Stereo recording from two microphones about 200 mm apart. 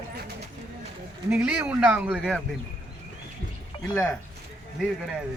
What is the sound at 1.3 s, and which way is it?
A man's voice, 5° right (ahead or behind).